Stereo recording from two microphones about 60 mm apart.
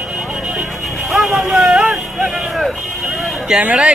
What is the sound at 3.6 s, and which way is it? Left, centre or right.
Speech, centre.